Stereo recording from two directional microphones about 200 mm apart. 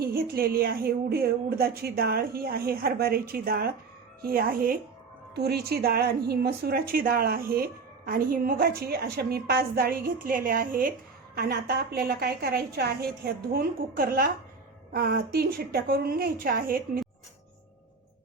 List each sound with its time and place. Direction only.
0.0 s a woman's voice: 50° right (ahead or behind)